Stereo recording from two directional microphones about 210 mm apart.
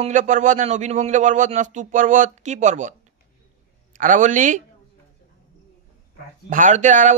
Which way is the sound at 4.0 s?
35° right (ahead or behind).